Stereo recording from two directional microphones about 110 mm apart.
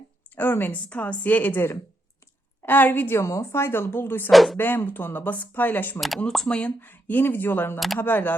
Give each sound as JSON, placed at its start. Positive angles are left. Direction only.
{"t": 0.3, "sound": "a woman's voice", "side_deg": 20}
{"t": 4.3, "sound": "speech", "side_deg": 0}
{"t": 4.5, "sound": "speech", "side_deg": 20}
{"t": 6.0, "sound": "speech", "side_deg": 5}